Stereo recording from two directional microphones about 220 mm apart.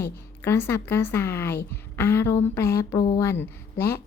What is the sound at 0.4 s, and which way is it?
Speech, 10° left (ahead or behind).